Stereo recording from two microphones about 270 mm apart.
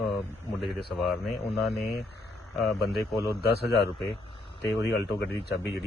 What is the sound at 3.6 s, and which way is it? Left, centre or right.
A man's voice, left.